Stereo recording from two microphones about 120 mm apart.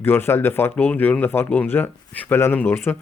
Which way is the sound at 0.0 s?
20° left (ahead or behind).